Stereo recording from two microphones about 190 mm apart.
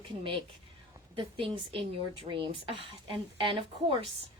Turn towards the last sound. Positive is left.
turn(degrees=-30)  # may be behind; listen again after turning